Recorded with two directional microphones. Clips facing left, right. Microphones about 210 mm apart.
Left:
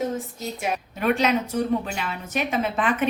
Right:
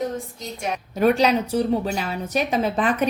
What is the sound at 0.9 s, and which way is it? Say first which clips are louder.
A woman's voice: right 4 dB; 40° right (ahead or behind).